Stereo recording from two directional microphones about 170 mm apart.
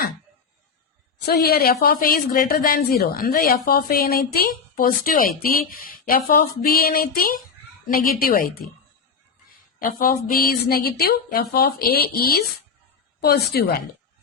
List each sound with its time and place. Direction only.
1.2 s a woman's voice: 70° left (ahead or behind)
9.8 s a woman's voice: 55° left (ahead or behind)